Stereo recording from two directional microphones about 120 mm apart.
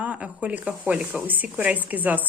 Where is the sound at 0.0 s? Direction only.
10° right (ahead or behind).